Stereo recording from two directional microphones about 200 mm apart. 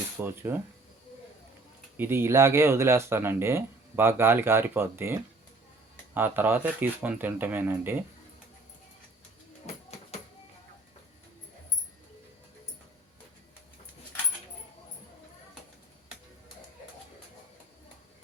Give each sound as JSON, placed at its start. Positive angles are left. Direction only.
{"t": 0.2, "sound": "speech", "side_deg": -10}
{"t": 2.0, "sound": "speech", "side_deg": -10}
{"t": 6.1, "sound": "speech", "side_deg": -10}
{"t": 9.7, "sound": "a sound", "side_deg": 30}